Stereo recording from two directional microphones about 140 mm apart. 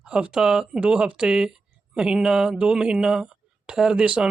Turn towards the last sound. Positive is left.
turn(degrees=-5)  # may be behind; listen again after turning